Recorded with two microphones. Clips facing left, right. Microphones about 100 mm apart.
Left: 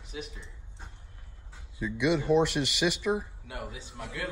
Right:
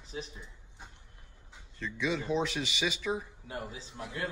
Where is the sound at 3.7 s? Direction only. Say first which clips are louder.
Left 1 dB; 30° right (ahead or behind).